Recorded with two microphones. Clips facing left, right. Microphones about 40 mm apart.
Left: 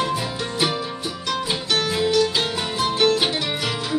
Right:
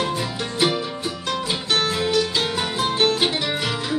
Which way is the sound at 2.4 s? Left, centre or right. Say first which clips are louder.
Even; centre.